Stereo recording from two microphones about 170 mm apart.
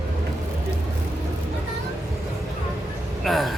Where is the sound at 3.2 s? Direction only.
Centre (ahead or behind).